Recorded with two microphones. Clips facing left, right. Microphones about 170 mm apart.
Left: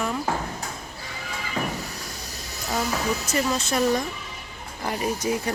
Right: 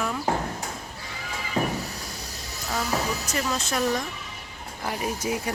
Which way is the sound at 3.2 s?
5° left (ahead or behind).